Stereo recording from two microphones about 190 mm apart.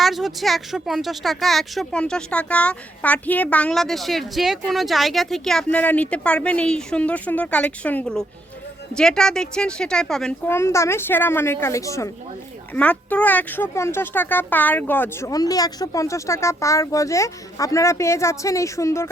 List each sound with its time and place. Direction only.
0.0 s speech: centre (ahead or behind)
10.5 s speech: 15° left (ahead or behind)